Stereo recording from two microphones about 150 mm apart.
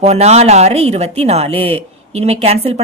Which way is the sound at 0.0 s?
45° right (ahead or behind).